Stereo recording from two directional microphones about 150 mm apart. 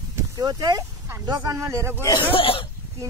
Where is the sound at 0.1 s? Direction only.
25° right (ahead or behind).